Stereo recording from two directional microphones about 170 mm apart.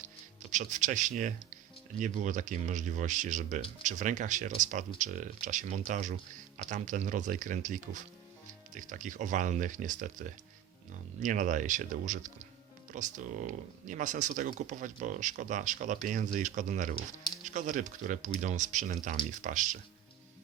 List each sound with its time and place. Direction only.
0.5 s speech: 45° right (ahead or behind)